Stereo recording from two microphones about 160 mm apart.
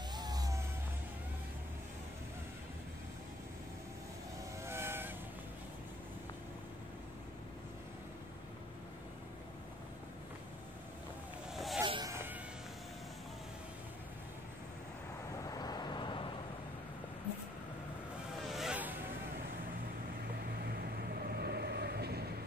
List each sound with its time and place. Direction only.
0.1 s music: 25° right (ahead or behind)
4.6 s vehicle: 15° right (ahead or behind)
11.5 s a sound: centre (ahead or behind)
11.8 s a sound: 30° right (ahead or behind)
12.1 s music: 15° right (ahead or behind)
15.4 s vehicle: 25° left (ahead or behind)
18.5 s vehicle: 5° right (ahead or behind)
20.6 s vehicle: 80° right